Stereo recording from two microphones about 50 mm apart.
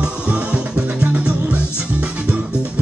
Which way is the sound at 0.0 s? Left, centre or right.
Right.